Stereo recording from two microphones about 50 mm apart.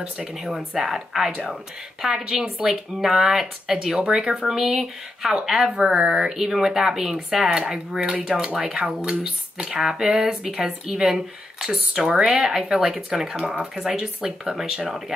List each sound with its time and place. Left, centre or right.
0.3 s speech: centre; by 6.2 s right
6.2 s speech: centre